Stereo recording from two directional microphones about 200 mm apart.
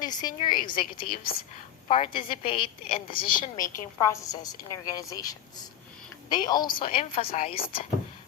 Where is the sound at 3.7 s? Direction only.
15° left (ahead or behind).